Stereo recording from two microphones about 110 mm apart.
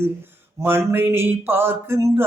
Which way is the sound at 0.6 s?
20° right (ahead or behind).